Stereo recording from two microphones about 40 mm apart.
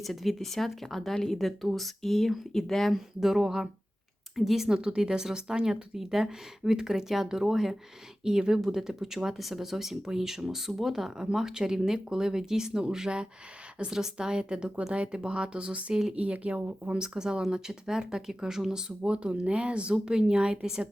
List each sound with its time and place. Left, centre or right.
0.0 s speech: centre
3.2 s speech: centre
4.7 s speech: right
16.9 s speech: centre